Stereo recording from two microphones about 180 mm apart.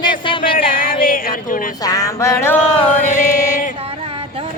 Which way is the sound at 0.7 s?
50° left (ahead or behind).